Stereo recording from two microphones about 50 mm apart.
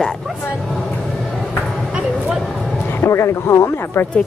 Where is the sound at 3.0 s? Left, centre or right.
Left.